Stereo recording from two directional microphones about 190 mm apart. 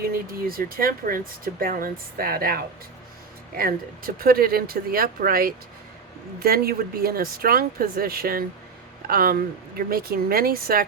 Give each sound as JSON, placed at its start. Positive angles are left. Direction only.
{"t": 0.1, "sound": "speech", "side_deg": -50}